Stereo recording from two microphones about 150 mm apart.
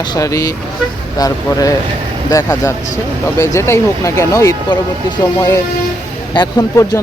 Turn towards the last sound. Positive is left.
turn(degrees=25)  # may be behind; listen again after turning